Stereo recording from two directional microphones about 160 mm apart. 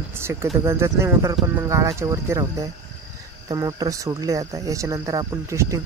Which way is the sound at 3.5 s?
20° right (ahead or behind).